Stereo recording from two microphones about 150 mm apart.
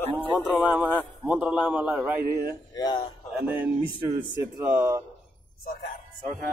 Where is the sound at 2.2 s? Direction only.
90° right.